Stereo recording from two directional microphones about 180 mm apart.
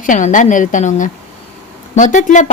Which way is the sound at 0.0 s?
45° left (ahead or behind).